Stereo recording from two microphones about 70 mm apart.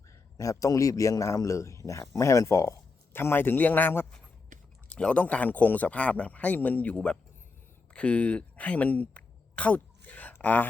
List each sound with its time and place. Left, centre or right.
0.3 s a man's voice: left
3.1 s a man's voice: left
4.9 s a man's voice: centre